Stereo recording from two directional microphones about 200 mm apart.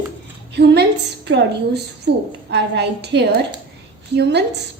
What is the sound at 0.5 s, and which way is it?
A woman's voice, 55° right (ahead or behind).